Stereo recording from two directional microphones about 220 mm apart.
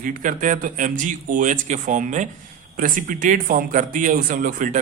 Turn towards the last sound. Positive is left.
turn(degrees=-35)  # may be behind; listen again after turning